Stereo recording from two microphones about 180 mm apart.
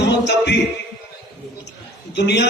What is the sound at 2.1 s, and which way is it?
Speech, 70° left (ahead or behind).